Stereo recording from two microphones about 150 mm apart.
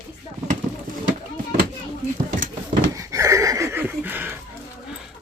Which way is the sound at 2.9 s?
20° right (ahead or behind).